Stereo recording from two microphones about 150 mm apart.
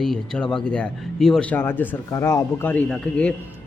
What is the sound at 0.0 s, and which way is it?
Speech, 5° left (ahead or behind).